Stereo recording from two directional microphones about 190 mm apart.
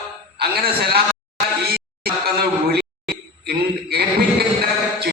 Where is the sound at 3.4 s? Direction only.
55° right (ahead or behind).